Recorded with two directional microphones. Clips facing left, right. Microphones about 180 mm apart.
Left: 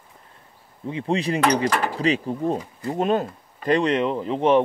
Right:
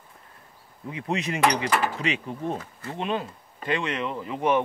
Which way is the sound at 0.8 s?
30° left (ahead or behind).